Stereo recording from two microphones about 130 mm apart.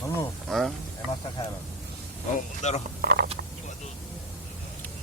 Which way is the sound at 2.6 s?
60° left (ahead or behind).